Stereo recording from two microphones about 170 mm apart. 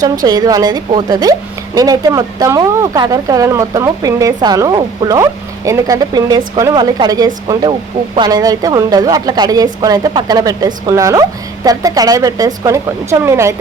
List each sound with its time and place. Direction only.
0.3 s a woman's voice: 20° right (ahead or behind)